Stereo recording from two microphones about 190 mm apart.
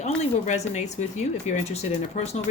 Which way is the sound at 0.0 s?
35° left (ahead or behind).